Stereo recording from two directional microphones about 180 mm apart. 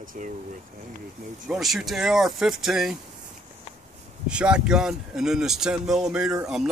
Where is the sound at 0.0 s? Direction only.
45° right (ahead or behind).